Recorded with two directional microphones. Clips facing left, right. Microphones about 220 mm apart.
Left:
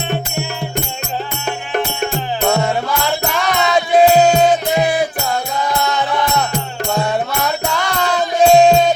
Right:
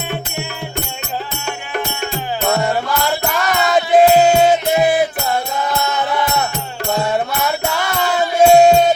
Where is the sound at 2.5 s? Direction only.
Centre (ahead or behind).